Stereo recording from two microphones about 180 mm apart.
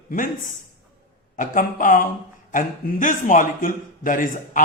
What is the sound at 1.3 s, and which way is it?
A man's voice, 45° left (ahead or behind).